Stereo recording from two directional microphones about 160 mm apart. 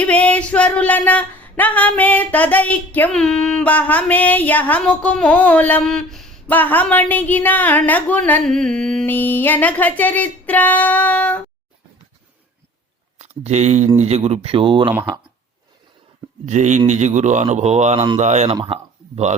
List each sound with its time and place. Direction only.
0.0 s a sound: 10° left (ahead or behind)
13.1 s speech: 45° right (ahead or behind)
16.5 s a man's voice: 50° right (ahead or behind)